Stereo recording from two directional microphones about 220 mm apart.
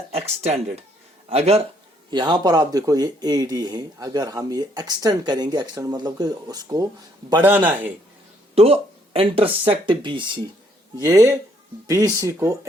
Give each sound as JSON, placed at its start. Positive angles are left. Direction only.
{"t": 0.3, "sound": "speech", "side_deg": -30}
{"t": 8.5, "sound": "speech", "side_deg": -25}